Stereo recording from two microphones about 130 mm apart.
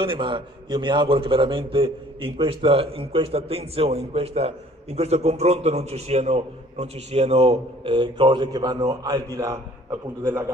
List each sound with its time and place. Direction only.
0.0 s a man's voice: 40° right (ahead or behind); by 10.4 s 20° right (ahead or behind)